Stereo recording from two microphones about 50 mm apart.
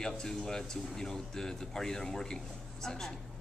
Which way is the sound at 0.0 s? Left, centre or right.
Centre.